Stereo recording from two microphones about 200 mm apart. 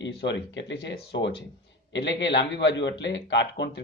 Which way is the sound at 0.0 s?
60° left (ahead or behind).